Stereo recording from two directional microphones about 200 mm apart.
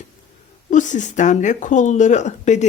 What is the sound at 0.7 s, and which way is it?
Speech, 40° left (ahead or behind).